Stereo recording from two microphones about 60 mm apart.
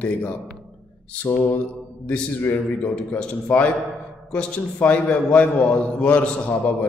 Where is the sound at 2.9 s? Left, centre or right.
Left.